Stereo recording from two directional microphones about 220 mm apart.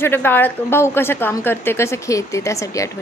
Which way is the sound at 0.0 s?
10° left (ahead or behind).